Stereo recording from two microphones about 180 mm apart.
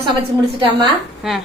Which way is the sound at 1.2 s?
Centre (ahead or behind).